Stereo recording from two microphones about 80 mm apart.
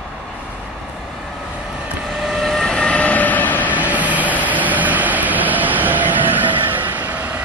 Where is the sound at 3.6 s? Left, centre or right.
Centre.